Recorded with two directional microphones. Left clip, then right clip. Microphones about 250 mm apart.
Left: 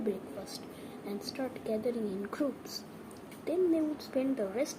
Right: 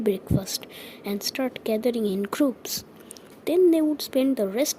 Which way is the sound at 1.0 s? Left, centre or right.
Right.